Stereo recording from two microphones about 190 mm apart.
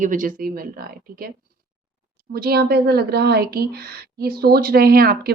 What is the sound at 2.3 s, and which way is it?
A woman's voice, 55° right (ahead or behind).